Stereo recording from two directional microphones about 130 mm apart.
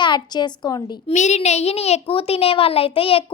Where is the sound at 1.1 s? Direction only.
65° left (ahead or behind); by 3.2 s 45° left (ahead or behind).